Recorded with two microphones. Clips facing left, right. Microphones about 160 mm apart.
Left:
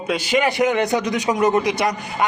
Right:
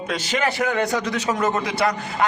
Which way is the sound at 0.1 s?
10° left (ahead or behind).